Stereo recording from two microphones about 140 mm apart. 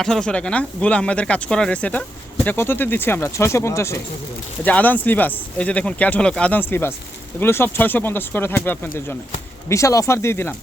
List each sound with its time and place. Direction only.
0.0 s speech: 5° left (ahead or behind)